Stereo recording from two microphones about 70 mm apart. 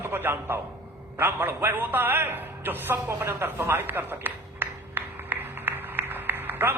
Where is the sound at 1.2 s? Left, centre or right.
Right.